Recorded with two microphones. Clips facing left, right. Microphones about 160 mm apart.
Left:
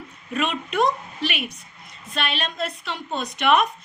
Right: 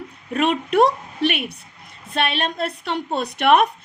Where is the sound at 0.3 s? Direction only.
60° right (ahead or behind).